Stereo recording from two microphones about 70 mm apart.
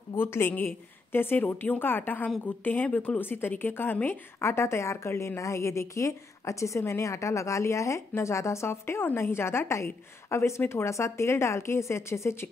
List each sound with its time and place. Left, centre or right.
0.1 s a woman's voice: left